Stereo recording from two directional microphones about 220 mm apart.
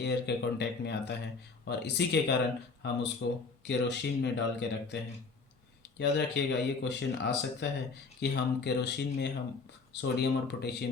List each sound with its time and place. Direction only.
0.0 s speech: 50° left (ahead or behind)
6.0 s speech: 50° left (ahead or behind)